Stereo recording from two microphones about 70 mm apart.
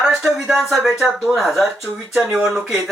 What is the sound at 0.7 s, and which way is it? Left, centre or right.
Speech, centre.